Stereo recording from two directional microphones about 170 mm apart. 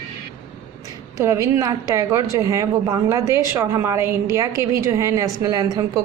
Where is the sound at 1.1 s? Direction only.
15° right (ahead or behind).